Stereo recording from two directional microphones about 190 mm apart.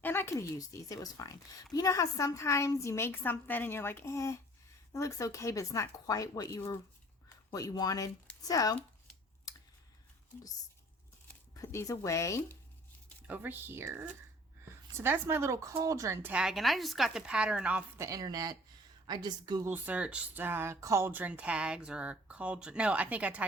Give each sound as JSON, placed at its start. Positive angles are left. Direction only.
{"t": 0.0, "sound": "a woman's voice", "side_deg": 10}
{"t": 11.5, "sound": "a woman's voice", "side_deg": 15}
{"t": 13.2, "sound": "a woman's voice", "side_deg": -10}
{"t": 19.6, "sound": "speech", "side_deg": -10}